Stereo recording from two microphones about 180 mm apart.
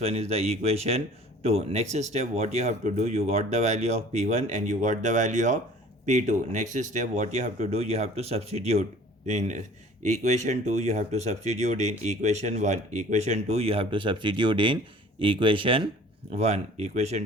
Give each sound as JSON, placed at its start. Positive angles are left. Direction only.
{"t": 0.0, "sound": "speech", "side_deg": -35}